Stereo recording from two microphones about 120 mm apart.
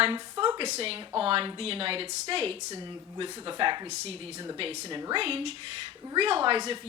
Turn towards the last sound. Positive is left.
turn(degrees=-45)  # may be behind; listen again after turning